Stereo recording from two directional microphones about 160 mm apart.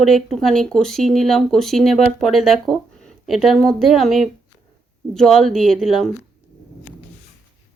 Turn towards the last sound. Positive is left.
turn(degrees=0)  # may be behind; listen again after turning